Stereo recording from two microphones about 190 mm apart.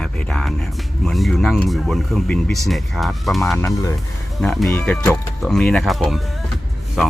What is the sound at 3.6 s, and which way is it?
Speech, 15° left (ahead or behind).